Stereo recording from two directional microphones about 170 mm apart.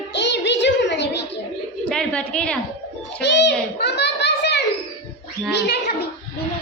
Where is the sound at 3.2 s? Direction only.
90° left.